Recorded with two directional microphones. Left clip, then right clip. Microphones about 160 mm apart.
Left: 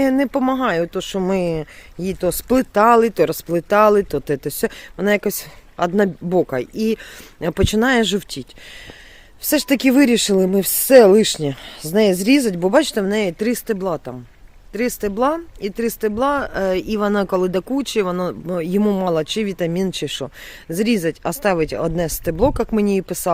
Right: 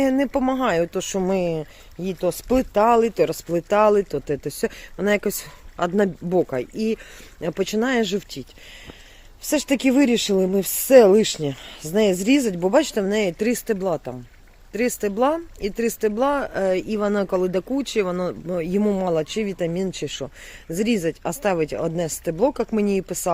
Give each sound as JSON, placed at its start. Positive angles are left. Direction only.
{"t": 0.0, "sound": "speech", "side_deg": 25}